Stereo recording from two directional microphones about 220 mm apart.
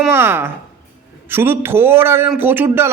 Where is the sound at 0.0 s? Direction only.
10° right (ahead or behind).